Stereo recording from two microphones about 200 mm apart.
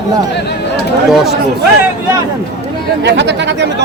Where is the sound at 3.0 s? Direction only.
60° right (ahead or behind).